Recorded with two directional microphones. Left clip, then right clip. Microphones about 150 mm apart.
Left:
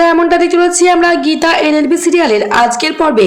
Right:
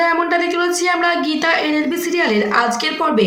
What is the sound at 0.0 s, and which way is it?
Speech, 50° left (ahead or behind).